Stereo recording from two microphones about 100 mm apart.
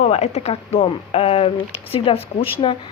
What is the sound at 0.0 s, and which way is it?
Speech, 90° left.